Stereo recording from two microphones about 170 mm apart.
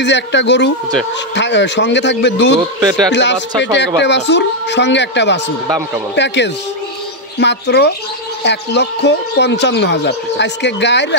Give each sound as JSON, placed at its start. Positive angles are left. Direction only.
{"t": 0.0, "sound": "speech", "side_deg": 90}